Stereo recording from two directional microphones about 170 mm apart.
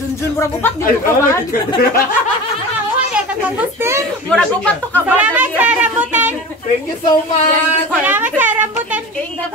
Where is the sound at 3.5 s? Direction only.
15° right (ahead or behind).